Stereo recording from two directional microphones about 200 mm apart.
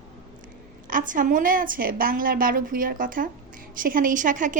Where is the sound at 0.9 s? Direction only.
40° right (ahead or behind).